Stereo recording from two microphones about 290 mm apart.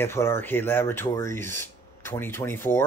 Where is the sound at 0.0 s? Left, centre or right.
Centre.